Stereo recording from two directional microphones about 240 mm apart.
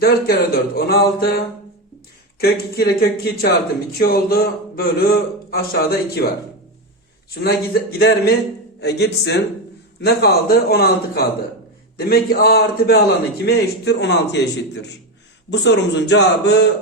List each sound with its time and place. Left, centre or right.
0.0 s a man's voice: left
2.4 s a man's voice: left
7.4 s a man's voice: left